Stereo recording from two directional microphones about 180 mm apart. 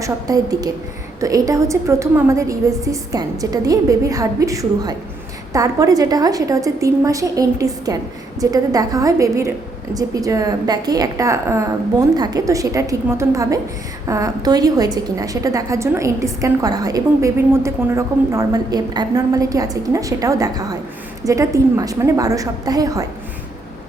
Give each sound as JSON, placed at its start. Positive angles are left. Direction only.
{"t": 0.0, "sound": "a woman's voice", "side_deg": -20}